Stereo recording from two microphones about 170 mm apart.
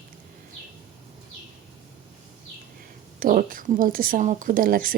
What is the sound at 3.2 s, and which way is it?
Speech, 55° right (ahead or behind).